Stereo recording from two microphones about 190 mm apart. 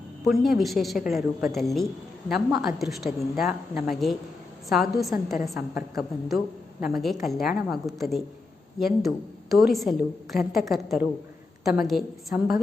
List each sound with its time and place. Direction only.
0.3 s a woman's voice: centre (ahead or behind)